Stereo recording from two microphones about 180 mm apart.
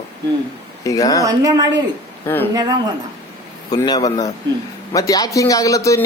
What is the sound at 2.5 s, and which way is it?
Speech, 20° right (ahead or behind).